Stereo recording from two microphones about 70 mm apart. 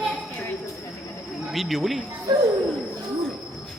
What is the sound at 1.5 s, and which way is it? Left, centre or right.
Speech, centre.